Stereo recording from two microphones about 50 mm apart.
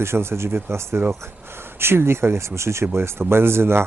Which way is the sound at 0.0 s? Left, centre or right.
Right.